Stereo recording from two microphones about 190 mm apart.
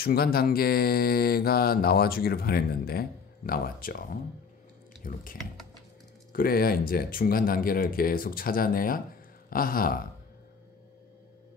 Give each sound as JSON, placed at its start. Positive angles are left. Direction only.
{"t": 0.0, "sound": "mantra", "side_deg": 55}